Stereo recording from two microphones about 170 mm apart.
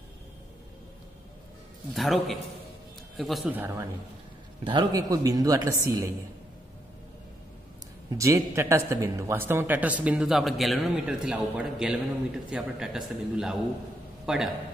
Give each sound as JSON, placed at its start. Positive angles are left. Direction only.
{"t": 2.0, "sound": "speech", "side_deg": 0}
{"t": 3.5, "sound": "a man's voice", "side_deg": -10}
{"t": 4.6, "sound": "speech", "side_deg": -25}
{"t": 8.1, "sound": "a man's voice", "side_deg": -20}